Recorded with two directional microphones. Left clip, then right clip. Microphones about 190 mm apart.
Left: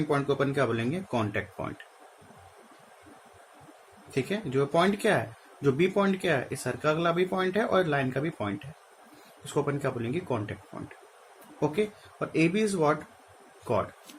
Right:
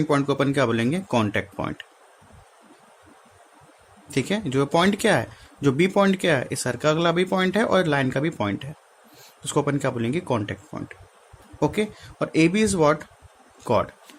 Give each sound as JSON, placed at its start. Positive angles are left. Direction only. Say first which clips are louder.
{"t": 0.1, "sound": "speech", "louder": "right 4 dB", "side_deg": -60}
{"t": 4.1, "sound": "speech", "louder": "right 5 dB", "side_deg": -60}